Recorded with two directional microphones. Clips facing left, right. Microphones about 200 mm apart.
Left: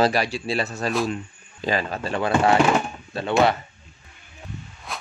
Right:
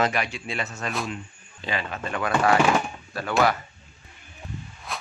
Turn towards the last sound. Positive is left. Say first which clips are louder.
# even
turn(degrees=0)  # may be behind; listen again after turning